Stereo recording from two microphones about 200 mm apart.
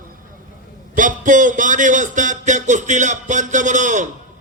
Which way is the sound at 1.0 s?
40° right (ahead or behind).